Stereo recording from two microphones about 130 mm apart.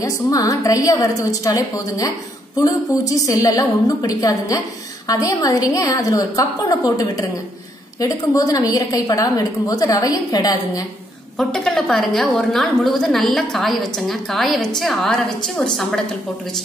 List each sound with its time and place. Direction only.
0.0 s a woman's voice: 25° left (ahead or behind)
11.3 s a woman's voice: 5° left (ahead or behind)